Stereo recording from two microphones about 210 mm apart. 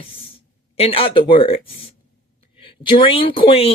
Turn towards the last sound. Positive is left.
turn(degrees=25)  # may be behind; listen again after turning